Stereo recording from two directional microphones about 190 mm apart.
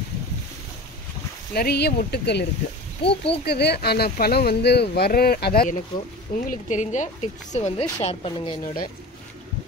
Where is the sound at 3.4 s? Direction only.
60° left (ahead or behind).